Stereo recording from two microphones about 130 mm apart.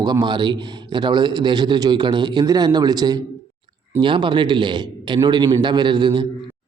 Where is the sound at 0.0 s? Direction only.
30° right (ahead or behind).